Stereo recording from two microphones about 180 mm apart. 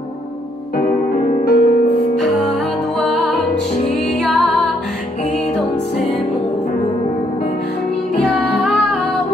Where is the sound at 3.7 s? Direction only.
35° left (ahead or behind).